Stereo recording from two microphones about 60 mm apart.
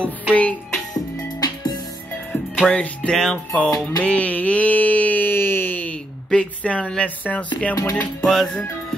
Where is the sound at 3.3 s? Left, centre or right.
Left.